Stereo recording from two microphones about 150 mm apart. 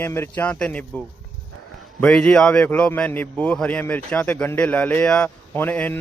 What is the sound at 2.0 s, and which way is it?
A man's voice, 5° left (ahead or behind).